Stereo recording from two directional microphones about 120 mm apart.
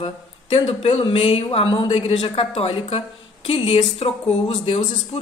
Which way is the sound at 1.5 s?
40° left (ahead or behind).